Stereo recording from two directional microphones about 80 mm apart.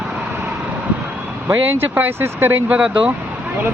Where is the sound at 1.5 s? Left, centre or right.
Right.